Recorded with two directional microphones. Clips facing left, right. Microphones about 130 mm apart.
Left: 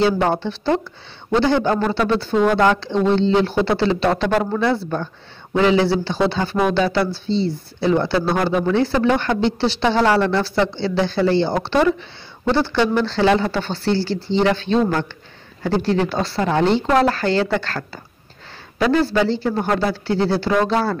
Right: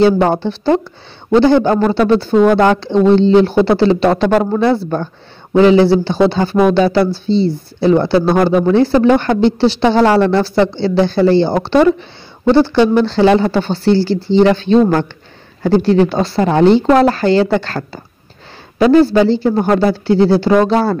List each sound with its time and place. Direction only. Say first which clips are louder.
0.0 s speech: right 6 dB; 35° right (ahead or behind)
12.5 s speech: right 7 dB; 25° right (ahead or behind)
13.0 s speech: right 6 dB; 40° right (ahead or behind)
14.4 s speech: right 7 dB; 40° right (ahead or behind)
15.8 s speech: right 7 dB; 30° right (ahead or behind)